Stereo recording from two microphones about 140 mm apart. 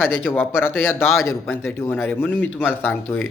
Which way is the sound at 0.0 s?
15° left (ahead or behind).